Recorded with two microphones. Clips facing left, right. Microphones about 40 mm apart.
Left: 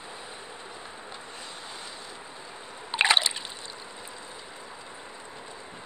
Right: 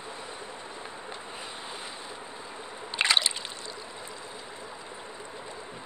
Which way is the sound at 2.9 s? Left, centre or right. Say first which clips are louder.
Left 3 dB; centre.